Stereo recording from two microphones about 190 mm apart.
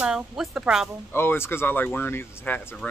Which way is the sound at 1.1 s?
10° left (ahead or behind).